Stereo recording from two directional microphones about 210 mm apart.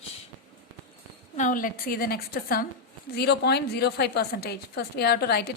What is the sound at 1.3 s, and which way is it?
A woman's voice, 40° left (ahead or behind).